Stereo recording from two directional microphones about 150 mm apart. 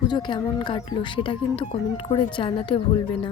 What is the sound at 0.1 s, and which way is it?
A woman's voice, 30° left (ahead or behind).